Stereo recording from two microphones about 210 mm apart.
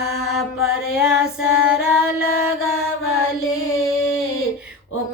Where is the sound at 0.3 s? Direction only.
5° right (ahead or behind).